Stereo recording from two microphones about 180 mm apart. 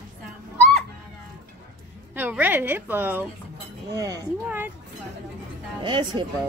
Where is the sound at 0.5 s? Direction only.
10° left (ahead or behind).